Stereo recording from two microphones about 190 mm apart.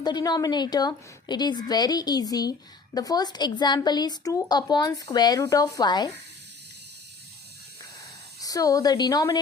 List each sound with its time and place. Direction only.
0.0 s a woman's voice: 20° left (ahead or behind)
8.4 s a woman's voice: 20° left (ahead or behind)